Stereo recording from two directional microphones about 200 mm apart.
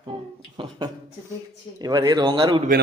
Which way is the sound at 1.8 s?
20° right (ahead or behind).